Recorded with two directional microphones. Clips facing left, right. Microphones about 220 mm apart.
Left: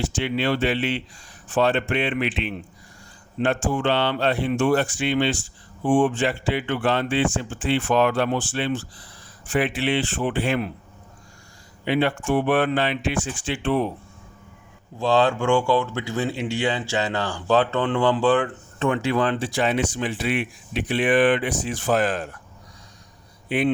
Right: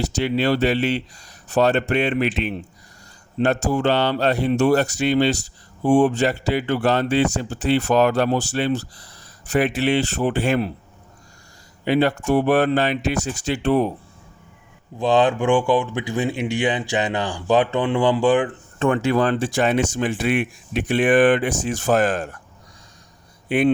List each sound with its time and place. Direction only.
0.0 s speech: 40° right (ahead or behind)
11.9 s speech: 40° right (ahead or behind)
14.9 s speech: 15° right (ahead or behind)
18.8 s speech: 45° right (ahead or behind)
23.5 s speech: 50° right (ahead or behind)